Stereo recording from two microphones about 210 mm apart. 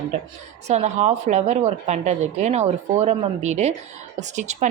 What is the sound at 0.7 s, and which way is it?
A woman's voice, 30° right (ahead or behind).